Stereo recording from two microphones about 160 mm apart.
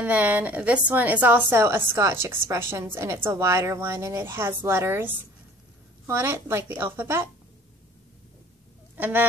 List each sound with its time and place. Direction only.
0.0 s a woman's voice: 10° right (ahead or behind)
8.9 s speech: 10° right (ahead or behind)